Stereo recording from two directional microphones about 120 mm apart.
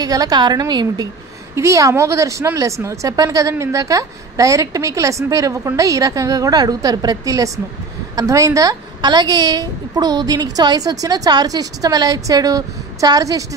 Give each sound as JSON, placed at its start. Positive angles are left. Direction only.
{"t": 0.0, "sound": "a woman's voice", "side_deg": -30}
{"t": 1.5, "sound": "a woman's voice", "side_deg": -25}